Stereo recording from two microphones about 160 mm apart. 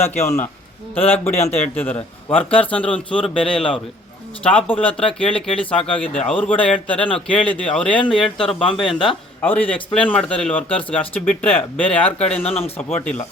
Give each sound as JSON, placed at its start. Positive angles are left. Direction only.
{"t": 0.0, "sound": "speech", "side_deg": 15}
{"t": 1.4, "sound": "speech", "side_deg": 40}
{"t": 1.7, "sound": "speech", "side_deg": 10}
{"t": 2.3, "sound": "speech", "side_deg": 35}
{"t": 3.1, "sound": "speech", "side_deg": 5}
{"t": 12.3, "sound": "speech", "side_deg": 40}
{"t": 12.7, "sound": "speech", "side_deg": 10}